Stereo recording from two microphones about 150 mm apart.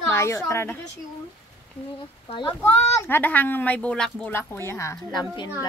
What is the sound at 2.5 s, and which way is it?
Speech, 15° left (ahead or behind).